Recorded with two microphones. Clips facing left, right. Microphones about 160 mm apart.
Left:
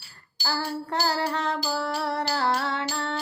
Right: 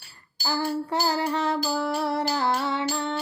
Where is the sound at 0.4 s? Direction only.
5° right (ahead or behind).